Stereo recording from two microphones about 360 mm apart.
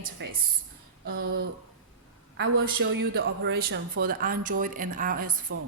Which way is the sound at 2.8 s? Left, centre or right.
Right.